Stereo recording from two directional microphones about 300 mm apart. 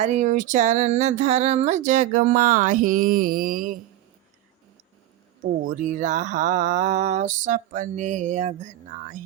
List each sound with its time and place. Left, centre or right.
0.0 s speech: right
5.6 s speech: right